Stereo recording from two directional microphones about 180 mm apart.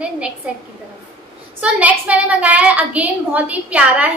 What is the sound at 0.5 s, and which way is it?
A woman's voice, 5° right (ahead or behind).